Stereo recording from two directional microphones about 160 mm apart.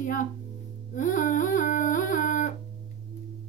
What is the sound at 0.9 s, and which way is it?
Humming, 55° left (ahead or behind).